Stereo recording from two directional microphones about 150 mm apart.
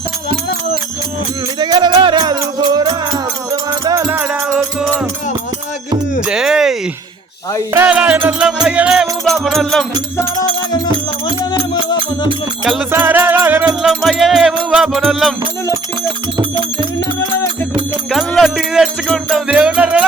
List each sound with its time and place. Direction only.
1.5 s music: 30° right (ahead or behind)
4.1 s music: 10° right (ahead or behind)
6.2 s music: 5° right (ahead or behind)
10.7 s music: 30° left (ahead or behind)
12.9 s music: 10° right (ahead or behind)
18.1 s music: centre (ahead or behind)
19.5 s music: 10° right (ahead or behind)